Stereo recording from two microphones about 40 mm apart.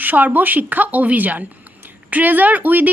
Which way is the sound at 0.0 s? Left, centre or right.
Right.